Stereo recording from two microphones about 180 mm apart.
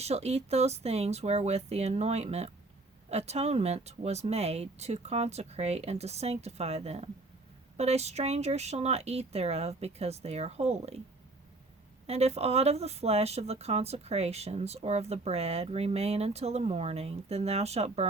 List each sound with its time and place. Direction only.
0.0 s speech: 35° right (ahead or behind)
12.0 s speech: 35° right (ahead or behind)